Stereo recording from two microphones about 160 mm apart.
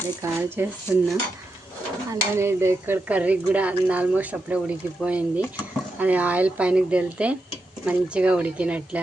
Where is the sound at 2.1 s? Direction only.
15° right (ahead or behind).